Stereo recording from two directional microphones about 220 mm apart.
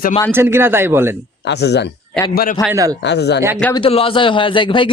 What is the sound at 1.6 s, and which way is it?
Speech, 50° left (ahead or behind).